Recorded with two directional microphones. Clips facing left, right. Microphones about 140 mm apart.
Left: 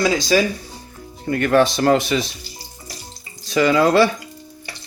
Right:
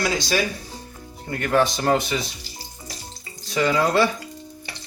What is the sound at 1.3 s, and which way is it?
Speech, 80° left.